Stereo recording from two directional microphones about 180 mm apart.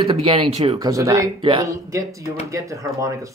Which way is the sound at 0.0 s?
30° right (ahead or behind).